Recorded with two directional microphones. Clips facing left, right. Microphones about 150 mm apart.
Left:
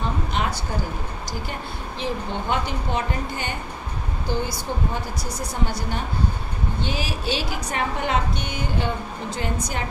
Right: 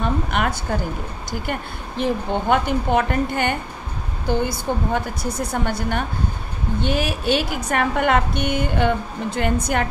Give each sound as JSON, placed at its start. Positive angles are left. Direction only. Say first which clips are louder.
{"t": 0.0, "sound": "a woman's voice", "louder": "right 4 dB", "side_deg": -60}
{"t": 2.0, "sound": "a woman's voice", "louder": "right 6 dB", "side_deg": -55}